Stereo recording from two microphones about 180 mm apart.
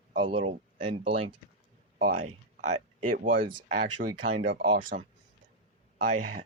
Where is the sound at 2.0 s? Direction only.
45° right (ahead or behind).